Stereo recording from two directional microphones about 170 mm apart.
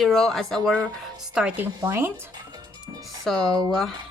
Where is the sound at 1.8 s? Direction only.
15° right (ahead or behind).